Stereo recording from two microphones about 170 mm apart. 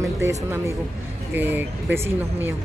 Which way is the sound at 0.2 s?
15° right (ahead or behind).